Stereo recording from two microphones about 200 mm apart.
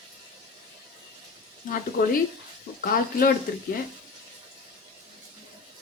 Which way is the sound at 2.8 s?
45° left (ahead or behind).